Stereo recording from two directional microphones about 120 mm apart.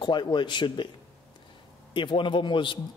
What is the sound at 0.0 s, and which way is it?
Speech, 40° left (ahead or behind).